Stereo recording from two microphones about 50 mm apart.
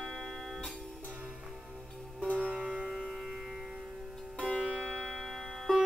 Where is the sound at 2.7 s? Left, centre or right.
Centre.